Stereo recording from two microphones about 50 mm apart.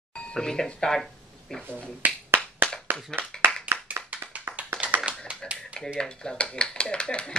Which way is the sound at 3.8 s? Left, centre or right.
Right.